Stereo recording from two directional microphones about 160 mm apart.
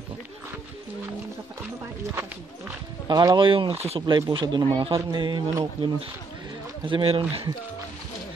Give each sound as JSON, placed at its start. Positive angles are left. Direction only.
{"t": 3.1, "sound": "speech", "side_deg": -25}
{"t": 4.0, "sound": "speech", "side_deg": -30}